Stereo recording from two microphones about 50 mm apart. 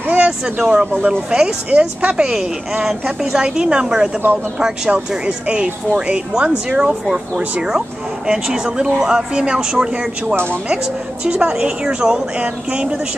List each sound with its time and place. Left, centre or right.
0.1 s a woman's voice: centre
2.0 s speech: right
2.8 s a woman's voice: centre
10.3 s speech: right
11.2 s a woman's voice: centre